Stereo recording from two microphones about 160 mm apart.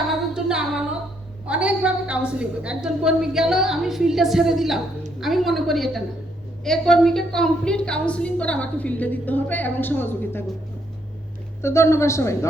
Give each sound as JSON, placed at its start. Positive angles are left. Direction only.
{"t": 0.1, "sound": "music", "side_deg": -5}
{"t": 1.5, "sound": "a woman's voice", "side_deg": -5}
{"t": 11.6, "sound": "a woman's voice", "side_deg": 15}